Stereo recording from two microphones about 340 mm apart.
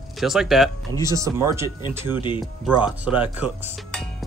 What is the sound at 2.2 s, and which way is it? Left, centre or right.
Speech, centre.